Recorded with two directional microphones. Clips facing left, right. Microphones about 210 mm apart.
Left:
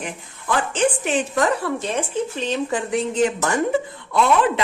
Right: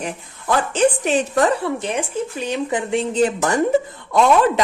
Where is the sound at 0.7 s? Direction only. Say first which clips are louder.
Right 4 dB; 40° right (ahead or behind).